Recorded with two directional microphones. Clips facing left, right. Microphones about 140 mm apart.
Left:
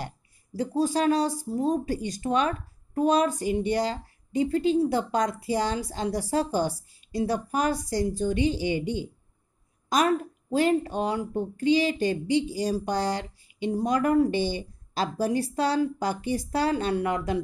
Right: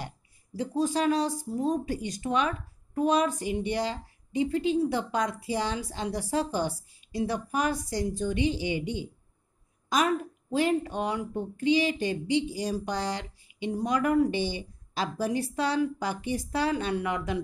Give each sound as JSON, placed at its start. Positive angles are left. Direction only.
{"t": 0.0, "sound": "speech", "side_deg": 40}